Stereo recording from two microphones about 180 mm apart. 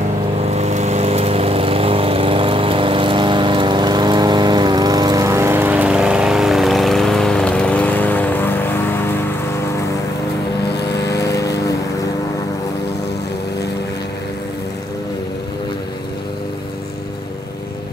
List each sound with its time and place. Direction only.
0.5 s lawn mower: 35° right (ahead or behind); by 9.1 s 10° left (ahead or behind)
11.1 s vehicle: 20° left (ahead or behind)